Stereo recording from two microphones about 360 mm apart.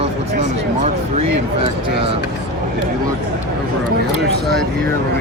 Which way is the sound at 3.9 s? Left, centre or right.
Right.